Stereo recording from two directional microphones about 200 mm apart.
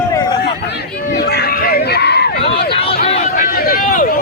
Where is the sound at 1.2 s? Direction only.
50° left (ahead or behind).